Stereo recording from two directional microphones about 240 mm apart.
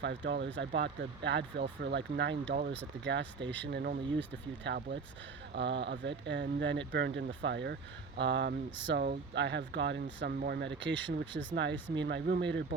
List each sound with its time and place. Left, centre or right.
0.0 s speech: right